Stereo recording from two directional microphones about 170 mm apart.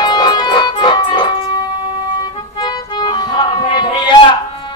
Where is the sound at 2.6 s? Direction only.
25° left (ahead or behind).